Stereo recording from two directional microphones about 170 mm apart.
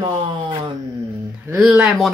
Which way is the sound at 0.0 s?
30° right (ahead or behind).